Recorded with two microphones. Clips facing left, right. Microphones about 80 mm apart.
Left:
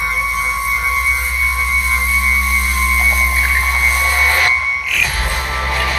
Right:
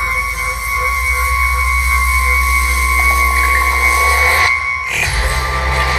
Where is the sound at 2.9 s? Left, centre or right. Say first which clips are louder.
Right 5 dB; right.